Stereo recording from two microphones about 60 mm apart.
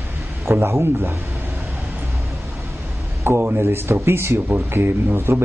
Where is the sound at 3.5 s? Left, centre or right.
Right.